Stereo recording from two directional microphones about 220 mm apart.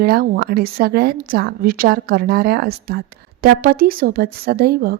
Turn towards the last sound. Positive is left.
turn(degrees=-45)  # may be behind; listen again after turning